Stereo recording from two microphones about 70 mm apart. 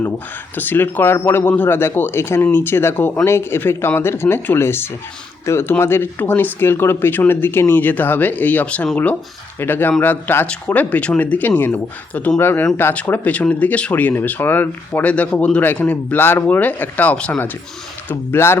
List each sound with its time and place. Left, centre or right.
0.5 s speech: left
18.1 s speech: left